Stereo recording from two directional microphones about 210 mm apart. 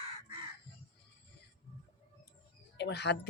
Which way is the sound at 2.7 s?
55° left (ahead or behind).